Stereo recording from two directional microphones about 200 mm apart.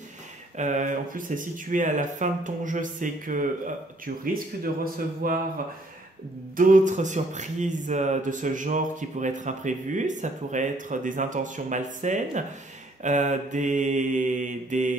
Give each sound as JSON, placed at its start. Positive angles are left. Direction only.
{"t": 0.6, "sound": "speech", "side_deg": -35}
{"t": 6.5, "sound": "speech", "side_deg": -40}